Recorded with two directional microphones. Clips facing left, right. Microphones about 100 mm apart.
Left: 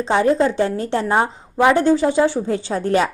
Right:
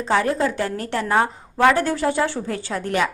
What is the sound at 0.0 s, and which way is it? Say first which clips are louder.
A woman's voice: left 4 dB; 25° left (ahead or behind).